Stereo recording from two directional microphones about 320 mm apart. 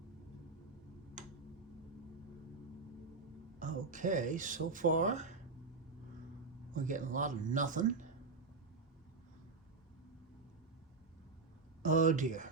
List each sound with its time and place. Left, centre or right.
3.6 s speech: right
6.7 s speech: right
11.8 s speech: right